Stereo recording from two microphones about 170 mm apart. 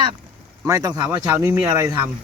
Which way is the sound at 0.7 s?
20° right (ahead or behind).